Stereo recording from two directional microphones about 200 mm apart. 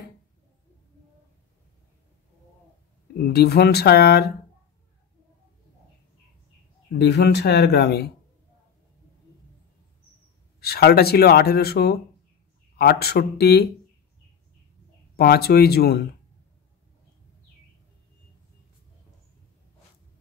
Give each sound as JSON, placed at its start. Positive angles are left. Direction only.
{"t": 3.2, "sound": "speech", "side_deg": 50}
{"t": 6.9, "sound": "speech", "side_deg": 55}
{"t": 10.6, "sound": "speech", "side_deg": 55}
{"t": 15.1, "sound": "speech", "side_deg": 50}